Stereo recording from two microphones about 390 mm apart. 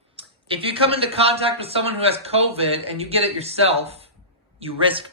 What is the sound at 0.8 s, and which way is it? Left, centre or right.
A man's voice, centre.